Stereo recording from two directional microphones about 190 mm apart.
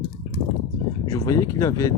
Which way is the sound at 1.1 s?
20° left (ahead or behind).